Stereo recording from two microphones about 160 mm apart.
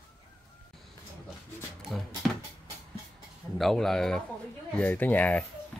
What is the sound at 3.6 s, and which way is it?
Speech, centre (ahead or behind).